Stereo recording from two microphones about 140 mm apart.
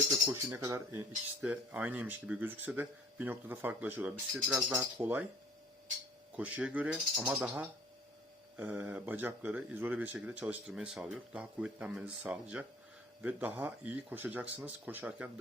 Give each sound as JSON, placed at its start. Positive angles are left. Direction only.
{"t": 0.3, "sound": "speech", "side_deg": -25}
{"t": 1.4, "sound": "speech", "side_deg": -10}
{"t": 6.3, "sound": "speech", "side_deg": -10}